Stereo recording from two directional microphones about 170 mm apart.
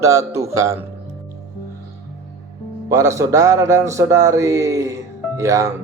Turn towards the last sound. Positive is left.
turn(degrees=-20)  # may be behind; listen again after turning